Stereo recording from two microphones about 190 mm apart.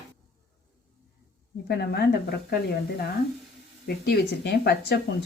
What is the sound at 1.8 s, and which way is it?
Speech, 60° left (ahead or behind).